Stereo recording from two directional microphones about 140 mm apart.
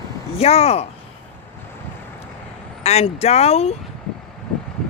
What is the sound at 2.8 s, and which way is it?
Speech, 50° left (ahead or behind).